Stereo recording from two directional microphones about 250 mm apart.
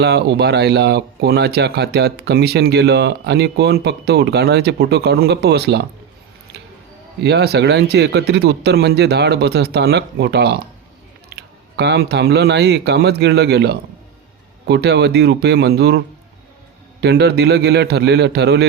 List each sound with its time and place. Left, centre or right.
0.0 s speech: right
7.2 s speech: right
17.0 s speech: right